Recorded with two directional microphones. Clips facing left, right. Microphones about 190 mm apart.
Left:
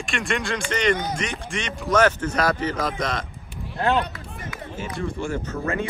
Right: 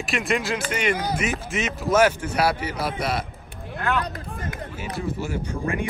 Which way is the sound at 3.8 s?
30° left (ahead or behind).